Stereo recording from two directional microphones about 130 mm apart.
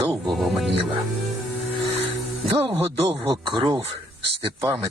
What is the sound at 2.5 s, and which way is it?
Speech, 45° right (ahead or behind).